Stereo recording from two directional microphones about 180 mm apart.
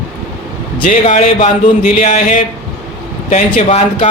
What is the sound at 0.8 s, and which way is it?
A man's voice, 45° left (ahead or behind).